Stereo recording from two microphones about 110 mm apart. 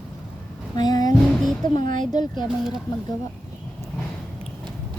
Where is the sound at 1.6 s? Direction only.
40° left (ahead or behind).